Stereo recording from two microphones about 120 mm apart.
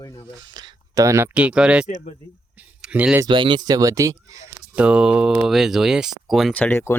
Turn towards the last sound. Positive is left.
turn(degrees=20)  # may be behind; listen again after turning